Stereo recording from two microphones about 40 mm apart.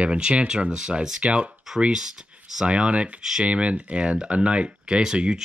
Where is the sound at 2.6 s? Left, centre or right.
Right.